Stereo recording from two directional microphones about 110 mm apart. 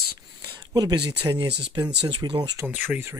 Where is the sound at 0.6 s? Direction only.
35° right (ahead or behind).